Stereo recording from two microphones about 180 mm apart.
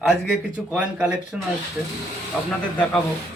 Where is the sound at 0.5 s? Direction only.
5° right (ahead or behind).